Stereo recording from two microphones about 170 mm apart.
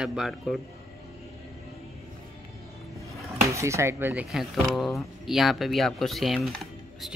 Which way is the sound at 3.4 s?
15° right (ahead or behind).